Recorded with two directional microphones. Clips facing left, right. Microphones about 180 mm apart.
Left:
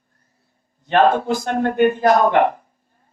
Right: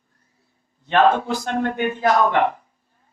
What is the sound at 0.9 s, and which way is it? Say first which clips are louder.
A man's voice: left 2 dB; 45° left (ahead or behind).